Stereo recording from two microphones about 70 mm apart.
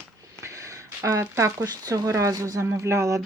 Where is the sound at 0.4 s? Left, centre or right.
Right.